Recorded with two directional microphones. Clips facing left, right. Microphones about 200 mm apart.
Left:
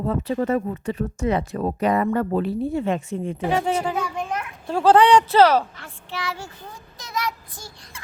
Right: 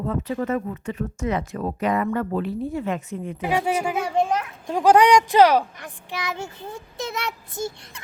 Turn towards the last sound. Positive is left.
turn(degrees=-25)  # may be behind; listen again after turning